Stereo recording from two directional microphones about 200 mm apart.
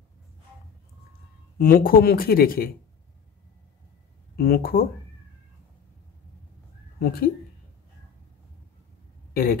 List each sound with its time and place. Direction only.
1.6 s speech: 45° left (ahead or behind)
4.4 s speech: 50° left (ahead or behind)
7.0 s speech: 50° left (ahead or behind)
9.3 s speech: 50° left (ahead or behind)